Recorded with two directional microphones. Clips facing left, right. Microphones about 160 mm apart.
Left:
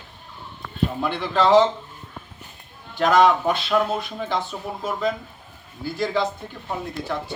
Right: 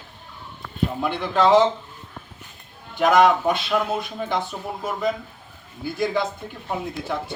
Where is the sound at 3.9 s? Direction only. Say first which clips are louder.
Right 1 dB; 15° right (ahead or behind).